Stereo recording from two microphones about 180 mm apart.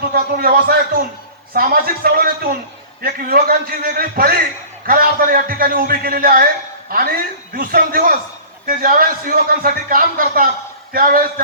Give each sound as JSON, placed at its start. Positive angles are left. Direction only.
{"t": 0.1, "sound": "a man's voice", "side_deg": -55}